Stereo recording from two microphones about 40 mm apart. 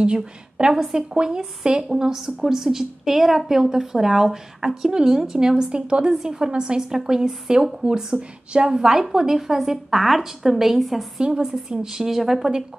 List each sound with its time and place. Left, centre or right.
0.0 s a woman's voice: right; by 11.1 s centre
11.1 s a woman's voice: right; by 12.5 s centre